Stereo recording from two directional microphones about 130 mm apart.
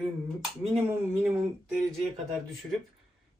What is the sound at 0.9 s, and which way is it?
Speech, 15° right (ahead or behind).